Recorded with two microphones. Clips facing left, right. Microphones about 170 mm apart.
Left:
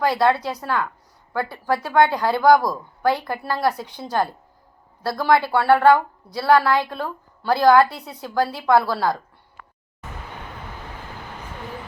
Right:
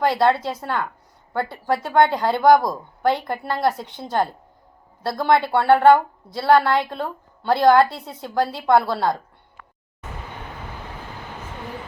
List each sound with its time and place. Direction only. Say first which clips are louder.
0.0 s a woman's voice: right 1 dB; 25° right (ahead or behind)
5.0 s a woman's voice: even; 25° right (ahead or behind)